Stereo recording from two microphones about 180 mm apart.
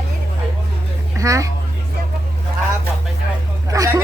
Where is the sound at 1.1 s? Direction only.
15° right (ahead or behind).